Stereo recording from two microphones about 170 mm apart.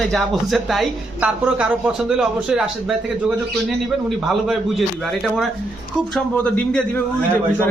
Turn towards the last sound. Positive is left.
turn(degrees=10)  # may be behind; listen again after turning